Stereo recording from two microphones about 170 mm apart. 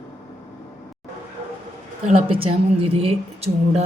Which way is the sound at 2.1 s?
35° right (ahead or behind).